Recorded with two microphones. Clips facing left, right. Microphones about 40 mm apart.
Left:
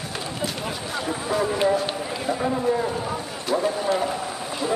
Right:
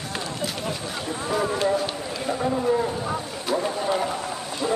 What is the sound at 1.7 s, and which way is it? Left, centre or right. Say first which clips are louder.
Run: left 1 dB; centre.